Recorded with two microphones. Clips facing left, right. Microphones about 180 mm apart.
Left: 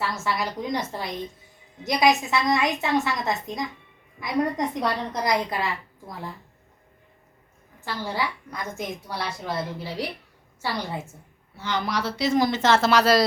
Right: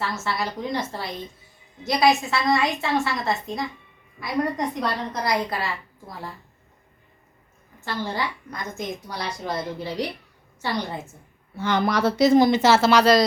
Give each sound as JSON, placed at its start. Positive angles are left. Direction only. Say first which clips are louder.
{"t": 0.0, "sound": "a woman's voice", "louder": "even", "side_deg": 15}
{"t": 7.9, "sound": "a woman's voice", "louder": "right 1 dB", "side_deg": 10}
{"t": 11.5, "sound": "a woman's voice", "louder": "right 5 dB", "side_deg": -50}
{"t": 12.4, "sound": "a woman's voice", "louder": "right 4 dB", "side_deg": -15}